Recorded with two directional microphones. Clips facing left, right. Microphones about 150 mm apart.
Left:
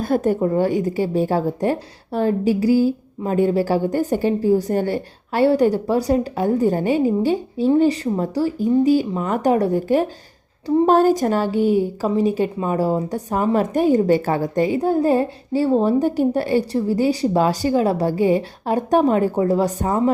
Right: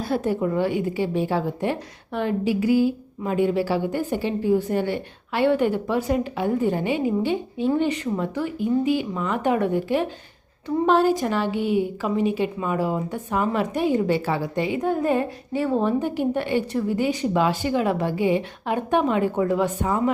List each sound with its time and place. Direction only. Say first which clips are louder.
0.0 s a woman's voice: left 5 dB; 45° left (ahead or behind)